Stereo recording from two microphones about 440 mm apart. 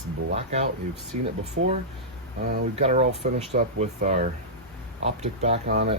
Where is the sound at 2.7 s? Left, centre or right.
Centre.